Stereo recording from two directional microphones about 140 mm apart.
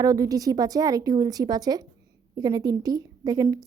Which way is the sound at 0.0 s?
25° right (ahead or behind).